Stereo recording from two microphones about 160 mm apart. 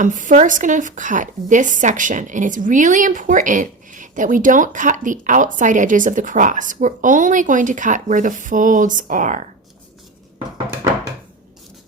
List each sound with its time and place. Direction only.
0.0 s a woman's voice: 55° right (ahead or behind)